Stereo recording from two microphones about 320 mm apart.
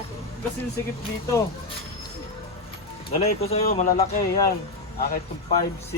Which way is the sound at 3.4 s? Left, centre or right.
Centre.